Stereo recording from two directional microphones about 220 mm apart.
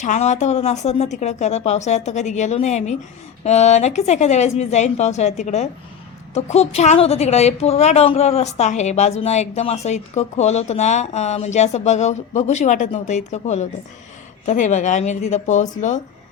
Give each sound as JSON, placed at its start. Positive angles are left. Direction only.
{"t": 0.0, "sound": "a woman's voice", "side_deg": 35}